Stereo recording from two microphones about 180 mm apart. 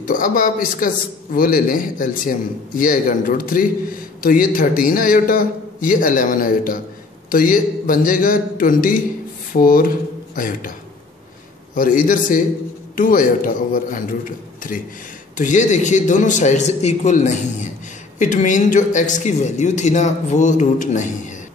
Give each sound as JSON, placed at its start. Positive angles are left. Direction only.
{"t": 0.0, "sound": "a man's voice", "side_deg": 50}
{"t": 11.7, "sound": "a man's voice", "side_deg": 50}
{"t": 15.3, "sound": "a man's voice", "side_deg": 45}